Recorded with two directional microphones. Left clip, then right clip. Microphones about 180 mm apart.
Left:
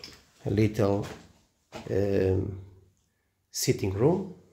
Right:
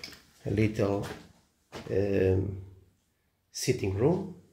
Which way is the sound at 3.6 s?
25° left (ahead or behind).